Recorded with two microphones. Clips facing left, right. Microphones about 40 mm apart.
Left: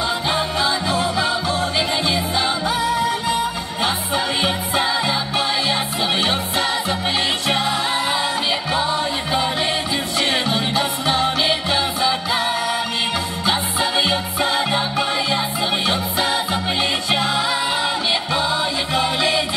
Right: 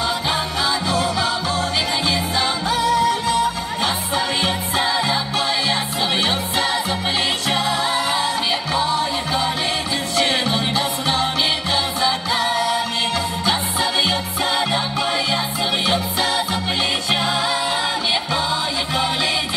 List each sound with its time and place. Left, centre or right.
0.0 s music: centre
6.2 s music: centre
10.2 s music: centre
12.4 s music: centre
16.2 s music: centre
17.1 s music: centre
19.0 s music: centre